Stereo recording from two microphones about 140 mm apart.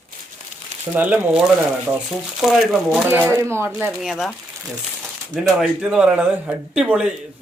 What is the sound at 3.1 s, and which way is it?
Speech, 20° right (ahead or behind).